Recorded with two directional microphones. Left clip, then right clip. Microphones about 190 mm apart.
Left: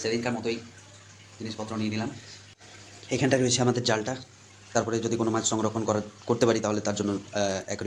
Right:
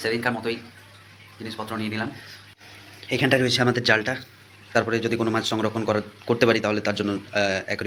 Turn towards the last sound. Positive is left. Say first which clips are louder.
# right 5 dB
turn(degrees=5)  # may be behind; listen again after turning